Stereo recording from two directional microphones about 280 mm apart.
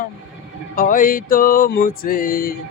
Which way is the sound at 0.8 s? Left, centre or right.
Left.